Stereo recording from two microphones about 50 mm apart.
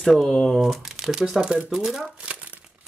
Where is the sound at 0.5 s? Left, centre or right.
Centre.